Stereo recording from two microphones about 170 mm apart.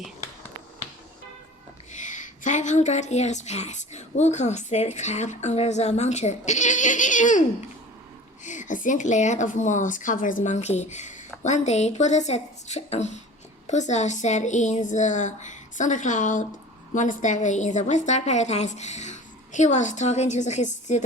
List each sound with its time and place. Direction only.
1.9 s a woman's voice: 45° left (ahead or behind)
8.4 s a woman's voice: 50° left (ahead or behind)